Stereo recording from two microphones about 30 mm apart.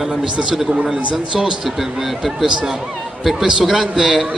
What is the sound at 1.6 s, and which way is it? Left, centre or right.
Speech, centre.